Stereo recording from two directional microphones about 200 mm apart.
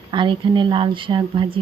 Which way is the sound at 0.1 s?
25° right (ahead or behind).